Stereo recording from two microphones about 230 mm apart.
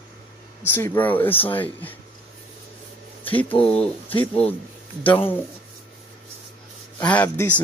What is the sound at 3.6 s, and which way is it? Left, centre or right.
Speech, left.